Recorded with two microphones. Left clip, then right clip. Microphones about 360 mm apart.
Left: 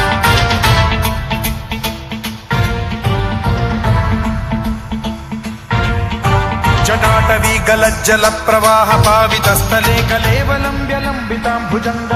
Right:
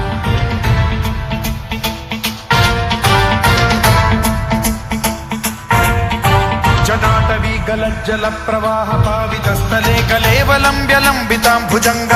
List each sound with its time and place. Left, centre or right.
0.1 s music: left
2.5 s music: centre; by 4.3 s right
5.6 s music: right; by 7.8 s left
8.0 s music: left
9.0 s music: left; by 10.7 s centre
10.8 s music: right